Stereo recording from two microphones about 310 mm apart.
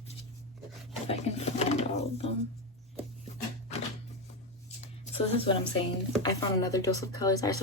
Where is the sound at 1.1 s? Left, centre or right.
Centre.